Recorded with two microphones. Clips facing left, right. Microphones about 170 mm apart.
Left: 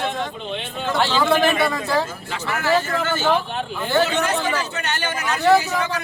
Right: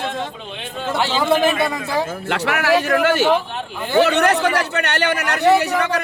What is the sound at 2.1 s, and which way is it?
A man's voice, 65° right (ahead or behind).